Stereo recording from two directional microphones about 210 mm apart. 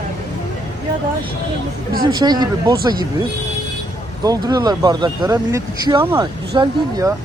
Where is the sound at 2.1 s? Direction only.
20° right (ahead or behind).